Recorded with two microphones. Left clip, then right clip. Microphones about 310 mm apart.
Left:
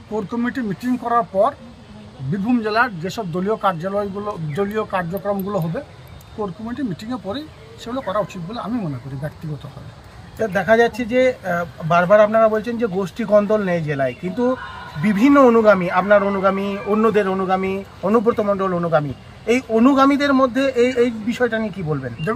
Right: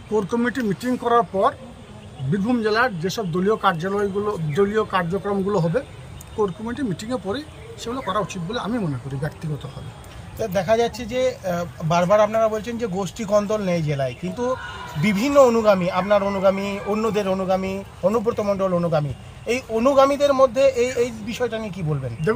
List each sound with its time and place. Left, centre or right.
0.1 s speech: centre
6.7 s speech: centre
10.4 s a man's voice: right